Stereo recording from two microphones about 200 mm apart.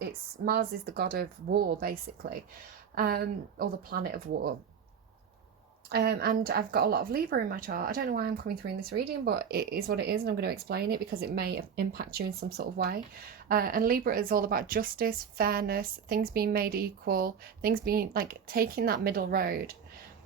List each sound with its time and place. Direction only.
0.0 s a woman's voice: 50° right (ahead or behind)
5.9 s a woman's voice: 55° right (ahead or behind)